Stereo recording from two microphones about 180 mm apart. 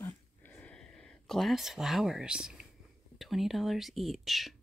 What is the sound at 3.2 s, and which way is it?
Speech, centre (ahead or behind).